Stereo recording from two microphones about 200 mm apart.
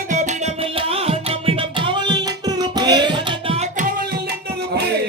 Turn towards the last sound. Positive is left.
turn(degrees=-25)  # may be behind; listen again after turning